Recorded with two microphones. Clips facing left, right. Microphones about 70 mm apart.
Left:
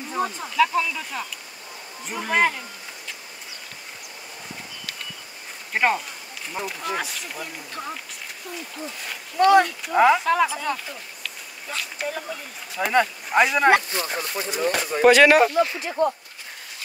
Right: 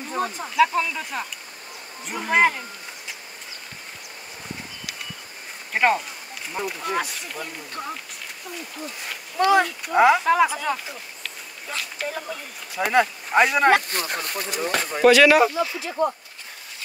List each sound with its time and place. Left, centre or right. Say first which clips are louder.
0.1 s speech: even; centre
5.7 s speech: right 2 dB; centre
9.4 s speech: left 3 dB; centre
13.8 s speech: even; right
15.0 s speech: even; left
15.5 s speech: left 4 dB; left